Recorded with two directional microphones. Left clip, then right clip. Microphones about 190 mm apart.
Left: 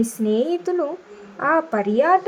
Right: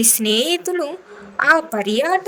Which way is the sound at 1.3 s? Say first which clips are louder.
Right 5 dB; 55° right (ahead or behind).